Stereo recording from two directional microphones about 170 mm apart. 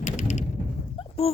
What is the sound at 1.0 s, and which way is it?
Dog, 35° left (ahead or behind).